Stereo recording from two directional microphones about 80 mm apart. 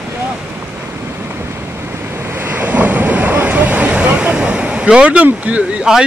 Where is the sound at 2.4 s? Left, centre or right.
Right.